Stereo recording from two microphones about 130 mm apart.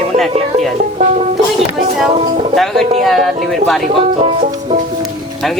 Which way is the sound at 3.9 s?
50° right (ahead or behind).